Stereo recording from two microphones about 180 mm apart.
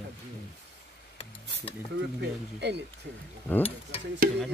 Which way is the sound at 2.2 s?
70° right (ahead or behind).